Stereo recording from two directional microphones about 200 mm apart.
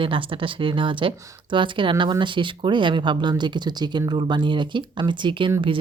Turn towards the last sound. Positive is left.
turn(degrees=-25)  # may be behind; listen again after turning